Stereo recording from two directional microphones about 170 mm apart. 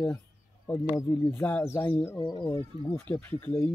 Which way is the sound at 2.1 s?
25° left (ahead or behind).